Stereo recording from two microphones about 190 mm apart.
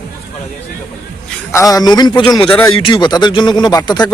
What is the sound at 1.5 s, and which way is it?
Speech, 15° left (ahead or behind).